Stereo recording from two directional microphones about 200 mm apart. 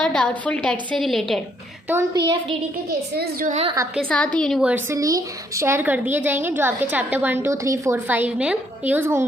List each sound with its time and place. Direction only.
0.0 s a woman's voice: 5° left (ahead or behind)
1.9 s a woman's voice: 15° right (ahead or behind)
3.9 s a woman's voice: 5° left (ahead or behind); by 9.2 s 10° right (ahead or behind)